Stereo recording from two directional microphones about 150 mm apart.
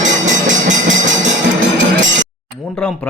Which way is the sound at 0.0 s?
55° right (ahead or behind).